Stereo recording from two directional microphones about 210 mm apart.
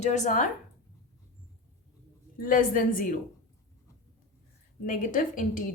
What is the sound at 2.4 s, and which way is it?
Speech, 40° left (ahead or behind).